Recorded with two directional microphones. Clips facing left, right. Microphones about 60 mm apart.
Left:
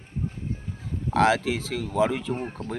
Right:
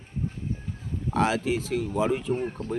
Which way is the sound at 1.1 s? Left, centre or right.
Left.